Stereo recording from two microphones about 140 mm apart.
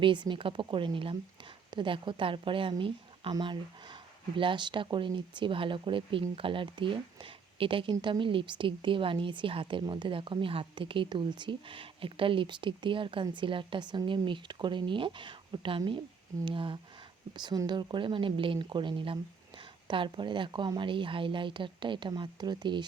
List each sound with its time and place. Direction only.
0.0 s a woman's voice: 35° right (ahead or behind)